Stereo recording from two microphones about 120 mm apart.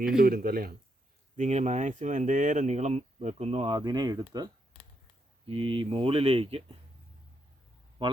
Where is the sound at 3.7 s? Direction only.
35° right (ahead or behind).